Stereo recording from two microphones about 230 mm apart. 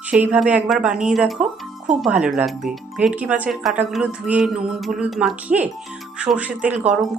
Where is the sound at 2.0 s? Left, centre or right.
Centre.